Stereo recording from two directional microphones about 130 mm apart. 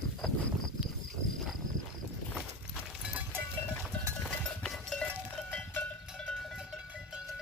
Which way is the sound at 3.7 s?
5° left (ahead or behind).